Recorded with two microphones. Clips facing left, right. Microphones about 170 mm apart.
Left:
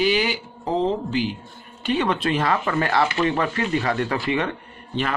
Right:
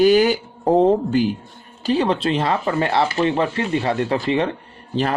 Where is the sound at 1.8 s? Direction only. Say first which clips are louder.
Right 3 dB; 35° right (ahead or behind).